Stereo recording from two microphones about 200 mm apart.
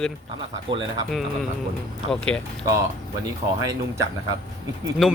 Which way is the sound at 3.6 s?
15° right (ahead or behind).